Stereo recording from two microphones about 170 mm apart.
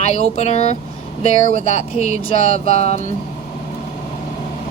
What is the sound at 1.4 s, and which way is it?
Speech, 50° right (ahead or behind).